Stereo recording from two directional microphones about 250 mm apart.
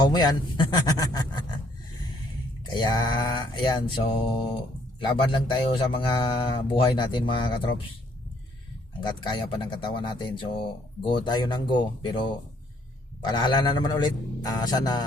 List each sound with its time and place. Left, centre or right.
0.0 s a man's voice: centre
2.7 s speech: centre
9.0 s a man's voice: centre